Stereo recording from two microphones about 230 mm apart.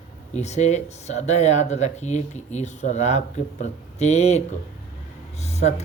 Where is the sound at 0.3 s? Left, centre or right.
Left.